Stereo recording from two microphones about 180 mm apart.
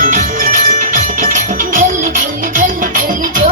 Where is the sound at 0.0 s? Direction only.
45° right (ahead or behind).